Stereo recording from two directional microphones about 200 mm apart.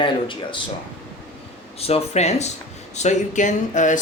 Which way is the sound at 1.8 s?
30° left (ahead or behind).